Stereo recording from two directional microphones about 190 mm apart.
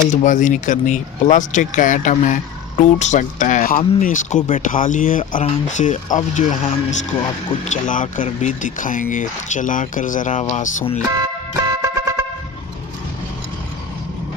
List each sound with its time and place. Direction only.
0.1 s speech: 40° left (ahead or behind)
11.1 s music: 20° right (ahead or behind)